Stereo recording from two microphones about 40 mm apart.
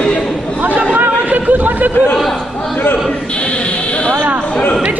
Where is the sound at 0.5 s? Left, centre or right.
Right.